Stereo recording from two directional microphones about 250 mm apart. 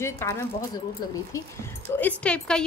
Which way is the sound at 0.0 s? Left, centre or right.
Centre.